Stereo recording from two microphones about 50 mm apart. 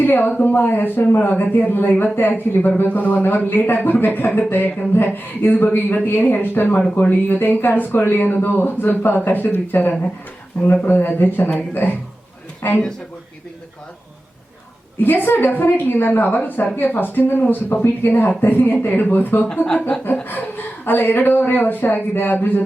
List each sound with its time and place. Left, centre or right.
0.0 s speech: left
2.6 s speech: left
14.9 s speech: left
20.8 s speech: left